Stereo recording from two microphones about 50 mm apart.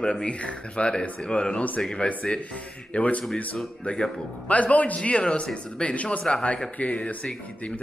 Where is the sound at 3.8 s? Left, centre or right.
Centre.